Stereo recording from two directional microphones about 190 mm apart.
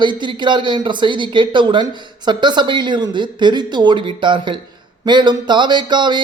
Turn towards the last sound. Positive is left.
turn(degrees=-25)  # may be behind; listen again after turning